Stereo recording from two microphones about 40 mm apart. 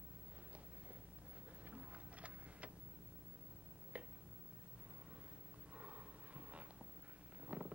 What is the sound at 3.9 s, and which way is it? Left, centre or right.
Tick-tock, right.